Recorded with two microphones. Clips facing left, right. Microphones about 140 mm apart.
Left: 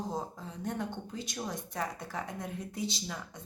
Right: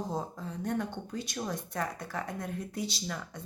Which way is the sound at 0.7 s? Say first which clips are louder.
Right 2 dB; 20° left (ahead or behind).